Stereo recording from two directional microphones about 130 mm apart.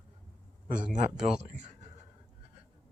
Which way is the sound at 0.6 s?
80° right.